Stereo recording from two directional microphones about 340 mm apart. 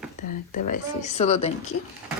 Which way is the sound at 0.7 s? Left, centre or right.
Left.